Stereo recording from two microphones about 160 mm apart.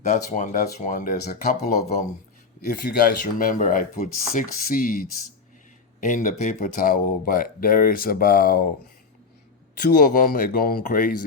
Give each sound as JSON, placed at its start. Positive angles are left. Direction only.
{"t": 0.1, "sound": "speech", "side_deg": 45}
{"t": 1.2, "sound": "speech", "side_deg": 80}
{"t": 2.6, "sound": "speech", "side_deg": 65}
{"t": 10.0, "sound": "speech", "side_deg": 60}